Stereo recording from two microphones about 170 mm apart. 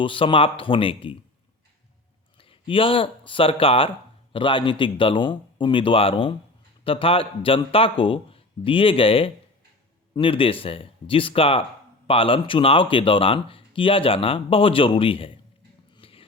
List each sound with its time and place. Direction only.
0.0 s speech: 30° left (ahead or behind)
2.4 s speech: 30° left (ahead or behind)
16.0 s a sound: 35° left (ahead or behind)